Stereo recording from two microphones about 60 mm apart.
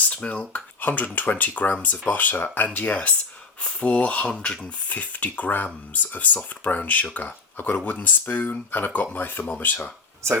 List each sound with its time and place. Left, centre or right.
0.0 s speech: left
4.9 s speech: left